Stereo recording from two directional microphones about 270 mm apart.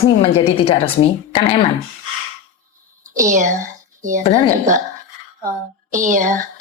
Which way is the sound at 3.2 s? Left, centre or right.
Right.